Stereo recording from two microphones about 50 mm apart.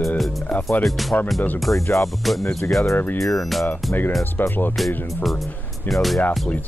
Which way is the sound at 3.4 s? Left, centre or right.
Centre.